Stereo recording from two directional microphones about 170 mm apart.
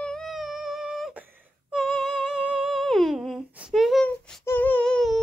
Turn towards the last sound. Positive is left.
turn(degrees=5)  # may be behind; listen again after turning